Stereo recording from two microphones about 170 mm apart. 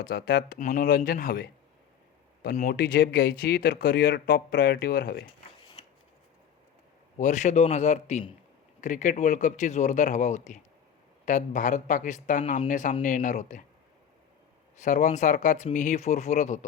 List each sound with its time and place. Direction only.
0.0 s speech: 70° left (ahead or behind)
2.6 s speech: 60° left (ahead or behind)
7.2 s a man's voice: 45° left (ahead or behind)
14.8 s speech: 45° left (ahead or behind)